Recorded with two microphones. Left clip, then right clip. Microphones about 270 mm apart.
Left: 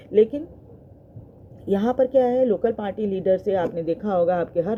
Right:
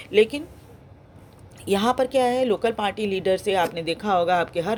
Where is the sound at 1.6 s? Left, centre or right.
Right.